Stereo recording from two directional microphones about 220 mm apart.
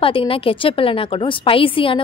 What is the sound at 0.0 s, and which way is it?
A woman's voice, 25° left (ahead or behind).